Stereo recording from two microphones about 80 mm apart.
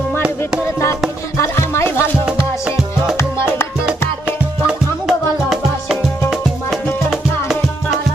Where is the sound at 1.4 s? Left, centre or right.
Left.